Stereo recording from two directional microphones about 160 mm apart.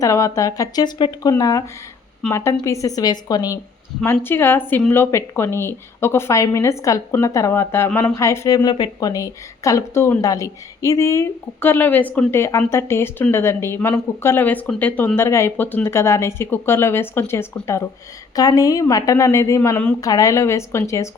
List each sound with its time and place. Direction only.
0.0 s a woman's voice: 20° left (ahead or behind)